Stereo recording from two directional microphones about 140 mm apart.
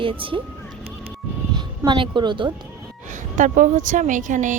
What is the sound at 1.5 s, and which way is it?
A woman's voice, 35° right (ahead or behind).